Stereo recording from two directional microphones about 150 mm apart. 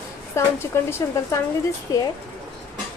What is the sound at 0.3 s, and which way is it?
A woman's voice, 15° left (ahead or behind).